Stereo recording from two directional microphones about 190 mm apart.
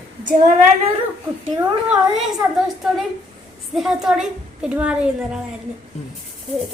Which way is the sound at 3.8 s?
Centre (ahead or behind).